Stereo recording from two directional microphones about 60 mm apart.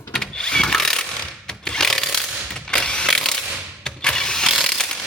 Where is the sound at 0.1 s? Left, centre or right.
Centre.